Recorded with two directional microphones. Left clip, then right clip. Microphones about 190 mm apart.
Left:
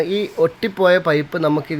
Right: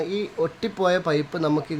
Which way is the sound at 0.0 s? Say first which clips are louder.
Left 8 dB; 20° left (ahead or behind).